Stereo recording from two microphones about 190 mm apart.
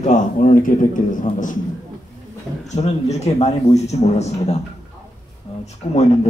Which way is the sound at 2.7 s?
35° left (ahead or behind).